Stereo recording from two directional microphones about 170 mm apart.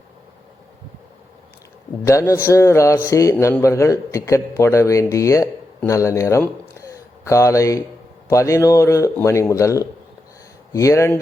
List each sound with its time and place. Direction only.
2.0 s a man's voice: 15° left (ahead or behind)